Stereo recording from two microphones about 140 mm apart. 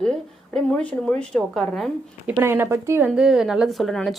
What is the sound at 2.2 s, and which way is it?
Speech, 15° right (ahead or behind).